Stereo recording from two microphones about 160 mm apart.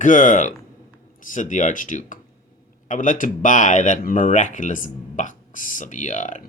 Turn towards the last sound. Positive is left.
turn(degrees=50)  # may be behind; listen again after turning